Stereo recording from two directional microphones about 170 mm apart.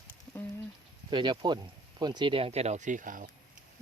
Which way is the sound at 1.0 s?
25° right (ahead or behind).